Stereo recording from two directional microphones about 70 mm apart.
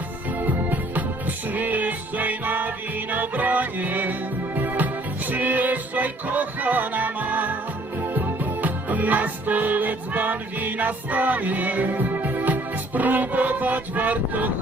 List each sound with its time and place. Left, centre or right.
0.3 s music: right